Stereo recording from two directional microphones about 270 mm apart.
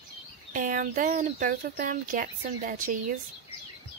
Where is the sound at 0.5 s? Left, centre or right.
Right.